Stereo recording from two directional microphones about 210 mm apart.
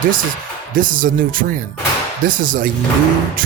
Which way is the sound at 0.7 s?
40° right (ahead or behind).